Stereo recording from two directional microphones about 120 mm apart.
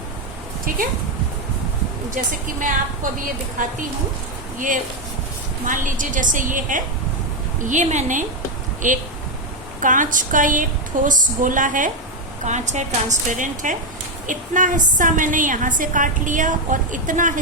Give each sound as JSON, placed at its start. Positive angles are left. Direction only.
{"t": 2.1, "sound": "a woman's voice", "side_deg": -90}
{"t": 4.5, "sound": "a woman's voice", "side_deg": -90}
{"t": 12.5, "sound": "a woman's voice", "side_deg": -80}